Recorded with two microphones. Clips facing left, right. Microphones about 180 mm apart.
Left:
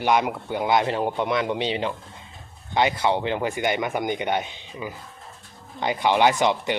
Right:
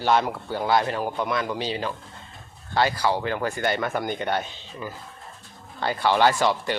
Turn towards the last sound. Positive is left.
turn(degrees=20)  # may be behind; listen again after turning